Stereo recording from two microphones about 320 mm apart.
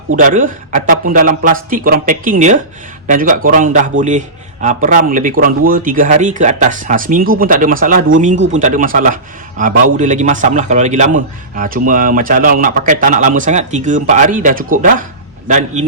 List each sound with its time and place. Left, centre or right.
0.2 s a man's voice: right